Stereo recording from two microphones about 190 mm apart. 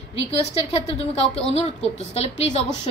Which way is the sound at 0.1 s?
30° left (ahead or behind).